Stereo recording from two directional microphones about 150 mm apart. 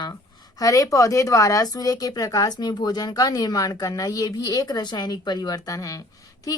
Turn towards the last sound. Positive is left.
turn(degrees=25)  # may be behind; listen again after turning